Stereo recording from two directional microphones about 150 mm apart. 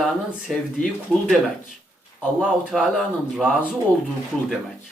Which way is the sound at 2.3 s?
5° right (ahead or behind).